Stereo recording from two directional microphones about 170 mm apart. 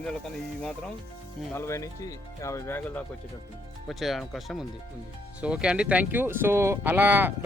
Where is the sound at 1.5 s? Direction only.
15° left (ahead or behind).